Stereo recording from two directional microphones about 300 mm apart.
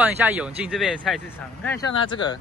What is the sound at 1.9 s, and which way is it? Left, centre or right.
Speech, centre.